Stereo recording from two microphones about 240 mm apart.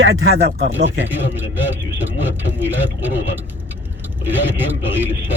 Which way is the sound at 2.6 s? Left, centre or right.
Centre.